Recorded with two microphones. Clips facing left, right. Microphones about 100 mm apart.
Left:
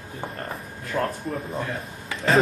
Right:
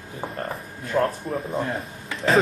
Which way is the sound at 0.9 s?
30° right (ahead or behind).